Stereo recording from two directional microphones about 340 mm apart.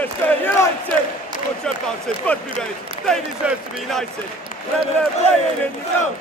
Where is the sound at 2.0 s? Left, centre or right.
Centre.